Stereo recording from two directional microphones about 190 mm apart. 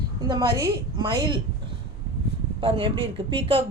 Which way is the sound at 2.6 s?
25° right (ahead or behind).